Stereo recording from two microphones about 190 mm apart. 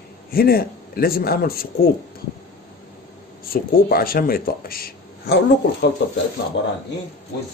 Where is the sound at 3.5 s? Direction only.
50° left (ahead or behind).